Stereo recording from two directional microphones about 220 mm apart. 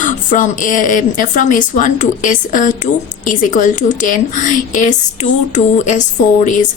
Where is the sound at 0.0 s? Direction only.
35° left (ahead or behind).